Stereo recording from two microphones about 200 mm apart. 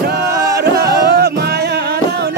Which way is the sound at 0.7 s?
50° right (ahead or behind).